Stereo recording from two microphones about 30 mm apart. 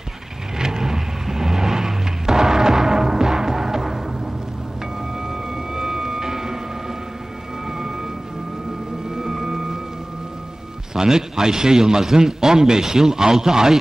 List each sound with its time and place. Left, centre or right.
0.6 s vehicle: centre
5.3 s music: centre
9.1 s music: centre
11.0 s a man's voice: right